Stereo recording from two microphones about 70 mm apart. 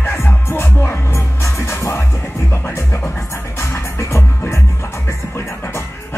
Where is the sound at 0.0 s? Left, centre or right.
Left.